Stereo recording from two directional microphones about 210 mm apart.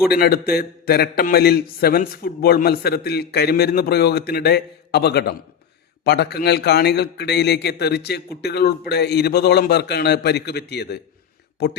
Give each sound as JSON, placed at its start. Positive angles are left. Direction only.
{"t": 0.1, "sound": "a man's voice", "side_deg": 45}